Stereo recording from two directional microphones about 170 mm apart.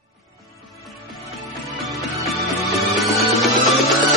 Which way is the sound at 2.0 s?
Centre (ahead or behind).